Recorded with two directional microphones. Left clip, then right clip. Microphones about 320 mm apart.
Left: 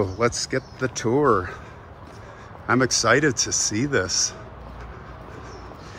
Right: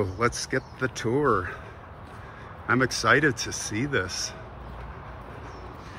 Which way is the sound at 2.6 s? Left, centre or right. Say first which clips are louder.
Left 3 dB; centre.